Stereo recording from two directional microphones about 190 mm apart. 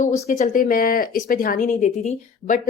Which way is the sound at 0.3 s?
40° left (ahead or behind).